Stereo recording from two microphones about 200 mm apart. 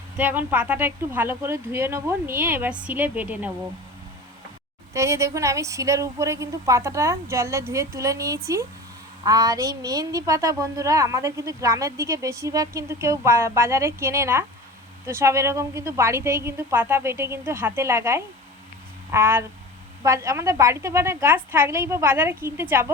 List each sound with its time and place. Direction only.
0.2 s a woman's voice: 10° right (ahead or behind)
4.9 s a woman's voice: 15° right (ahead or behind)